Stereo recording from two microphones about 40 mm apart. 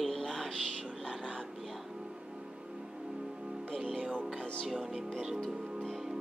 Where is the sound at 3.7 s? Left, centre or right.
Centre.